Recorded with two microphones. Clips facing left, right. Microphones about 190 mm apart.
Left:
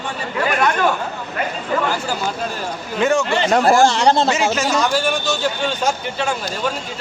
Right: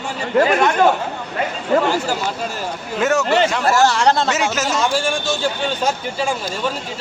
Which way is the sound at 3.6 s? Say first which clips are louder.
Left 5 dB; 25° left (ahead or behind).